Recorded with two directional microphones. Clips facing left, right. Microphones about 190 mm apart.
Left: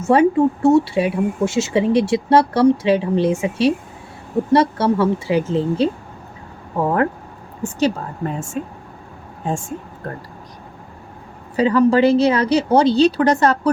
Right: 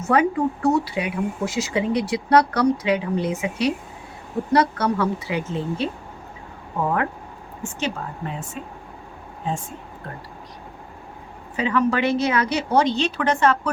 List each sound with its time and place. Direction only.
0.0 s speech: 25° left (ahead or behind)
7.6 s a woman's voice: 40° left (ahead or behind)
9.5 s speech: 45° left (ahead or behind)
11.5 s a woman's voice: 35° left (ahead or behind)